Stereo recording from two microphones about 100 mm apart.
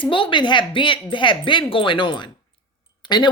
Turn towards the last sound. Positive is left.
turn(degrees=50)  # may be behind; listen again after turning